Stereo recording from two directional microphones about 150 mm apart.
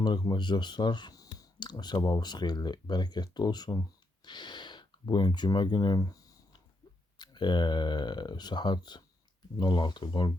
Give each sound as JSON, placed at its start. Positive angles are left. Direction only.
{"t": 0.0, "sound": "speech", "side_deg": 30}